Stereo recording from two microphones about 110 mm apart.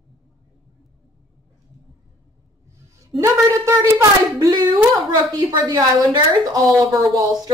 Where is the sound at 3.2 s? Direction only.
25° right (ahead or behind).